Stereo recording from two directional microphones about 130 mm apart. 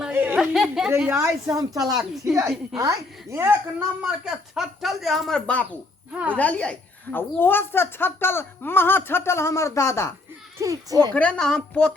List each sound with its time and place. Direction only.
0.0 s a sound: 15° right (ahead or behind)
0.3 s speech: centre (ahead or behind)
0.9 s a woman's voice: 20° right (ahead or behind); by 10.1 s 20° left (ahead or behind)
10.6 s a woman's voice: 25° right (ahead or behind)
11.1 s a woman's voice: 10° left (ahead or behind)